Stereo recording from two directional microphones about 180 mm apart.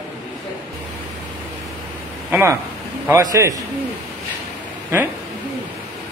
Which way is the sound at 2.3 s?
15° right (ahead or behind).